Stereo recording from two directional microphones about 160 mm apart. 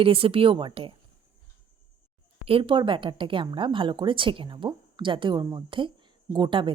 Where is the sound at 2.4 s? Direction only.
35° right (ahead or behind).